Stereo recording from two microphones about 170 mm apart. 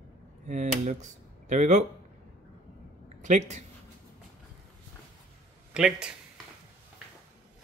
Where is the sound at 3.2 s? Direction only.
45° right (ahead or behind).